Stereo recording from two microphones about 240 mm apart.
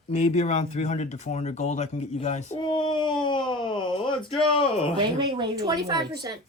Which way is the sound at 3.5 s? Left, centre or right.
Centre.